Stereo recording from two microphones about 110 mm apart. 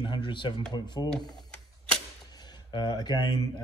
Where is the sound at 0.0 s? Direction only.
45° left (ahead or behind).